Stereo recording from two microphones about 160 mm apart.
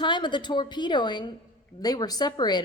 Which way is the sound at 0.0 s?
30° left (ahead or behind).